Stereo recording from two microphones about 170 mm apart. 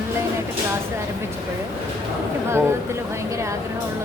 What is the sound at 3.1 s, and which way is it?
Speech, 15° right (ahead or behind).